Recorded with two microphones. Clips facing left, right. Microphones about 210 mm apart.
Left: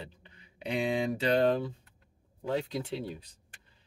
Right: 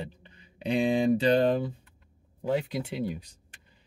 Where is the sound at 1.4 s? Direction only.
15° right (ahead or behind).